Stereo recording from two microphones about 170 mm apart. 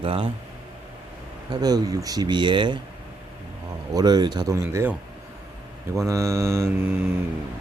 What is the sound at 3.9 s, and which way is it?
Speech, 25° right (ahead or behind).